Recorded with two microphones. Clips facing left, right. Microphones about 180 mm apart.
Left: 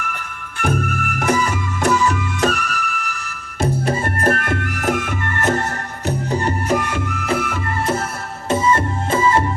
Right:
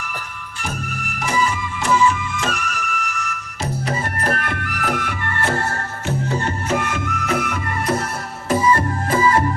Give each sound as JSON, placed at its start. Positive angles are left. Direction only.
{"t": 0.6, "sound": "music", "side_deg": 55}
{"t": 3.6, "sound": "music", "side_deg": 50}
{"t": 7.3, "sound": "music", "side_deg": 5}
{"t": 8.4, "sound": "music", "side_deg": 25}